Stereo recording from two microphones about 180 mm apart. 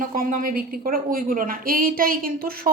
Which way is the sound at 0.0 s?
50° right (ahead or behind).